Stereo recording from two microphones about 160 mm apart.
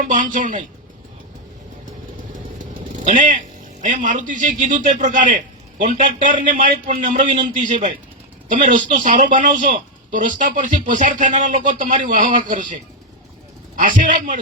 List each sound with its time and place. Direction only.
0.0 s a woman's voice: 55° right (ahead or behind)
2.6 s a man's voice: 55° right (ahead or behind)